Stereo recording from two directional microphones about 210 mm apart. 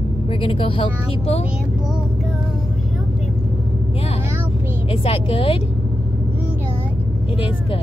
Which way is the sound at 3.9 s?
30° left (ahead or behind).